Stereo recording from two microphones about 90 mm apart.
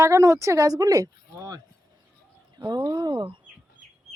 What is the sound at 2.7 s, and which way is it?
Speech, 50° right (ahead or behind).